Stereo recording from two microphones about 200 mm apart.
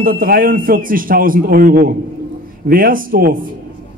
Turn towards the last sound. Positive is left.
turn(degrees=-45)  # may be behind; listen again after turning